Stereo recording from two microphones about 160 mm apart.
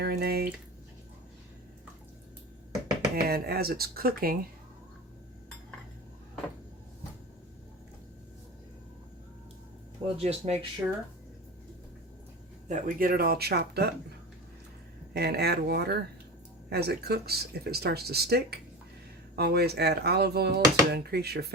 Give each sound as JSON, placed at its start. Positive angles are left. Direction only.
{"t": 0.0, "sound": "speech", "side_deg": -75}
{"t": 3.2, "sound": "speech", "side_deg": -75}
{"t": 10.2, "sound": "speech", "side_deg": -40}
{"t": 12.6, "sound": "speech", "side_deg": -55}
{"t": 15.1, "sound": "speech", "side_deg": -85}